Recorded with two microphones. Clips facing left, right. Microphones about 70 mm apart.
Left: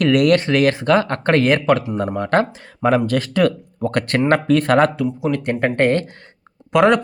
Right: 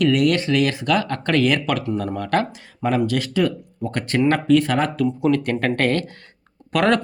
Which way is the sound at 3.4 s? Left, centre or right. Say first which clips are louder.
Left 5 dB; left.